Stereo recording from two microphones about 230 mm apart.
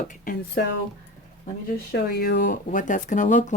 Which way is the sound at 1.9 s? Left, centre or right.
Left.